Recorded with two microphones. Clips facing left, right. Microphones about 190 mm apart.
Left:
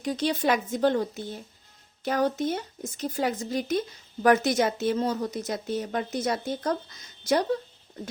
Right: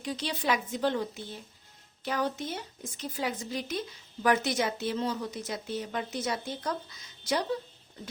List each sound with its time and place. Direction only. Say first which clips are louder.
0.0 s speech: left 7 dB; 45° left (ahead or behind)